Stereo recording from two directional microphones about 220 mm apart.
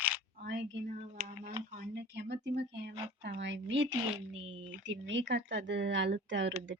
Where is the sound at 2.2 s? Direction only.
50° right (ahead or behind).